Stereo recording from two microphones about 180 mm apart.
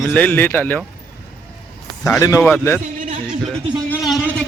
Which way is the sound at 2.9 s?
45° right (ahead or behind).